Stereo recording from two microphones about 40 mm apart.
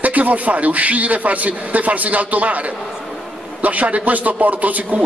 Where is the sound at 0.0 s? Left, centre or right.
Right.